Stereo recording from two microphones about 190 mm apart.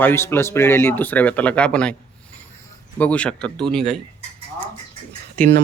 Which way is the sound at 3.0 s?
5° left (ahead or behind).